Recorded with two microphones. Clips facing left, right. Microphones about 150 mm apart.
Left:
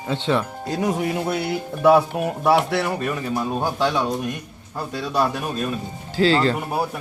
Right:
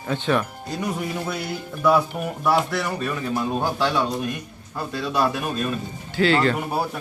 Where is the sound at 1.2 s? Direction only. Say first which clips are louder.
Left 5 dB; 65° left (ahead or behind).